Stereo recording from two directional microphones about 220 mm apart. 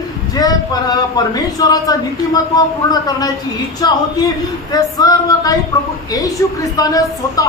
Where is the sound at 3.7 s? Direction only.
15° left (ahead or behind).